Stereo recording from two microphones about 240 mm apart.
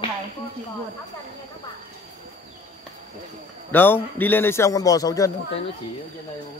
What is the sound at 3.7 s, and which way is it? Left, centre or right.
A man's voice, centre.